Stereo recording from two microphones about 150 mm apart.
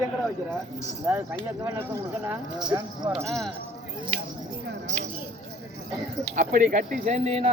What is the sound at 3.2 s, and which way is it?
Speech, centre (ahead or behind).